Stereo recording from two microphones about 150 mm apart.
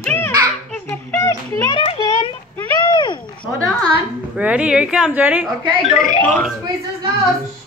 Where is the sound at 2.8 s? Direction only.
30° left (ahead or behind).